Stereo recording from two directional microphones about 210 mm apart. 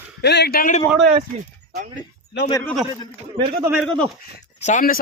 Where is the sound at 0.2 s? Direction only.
50° left (ahead or behind).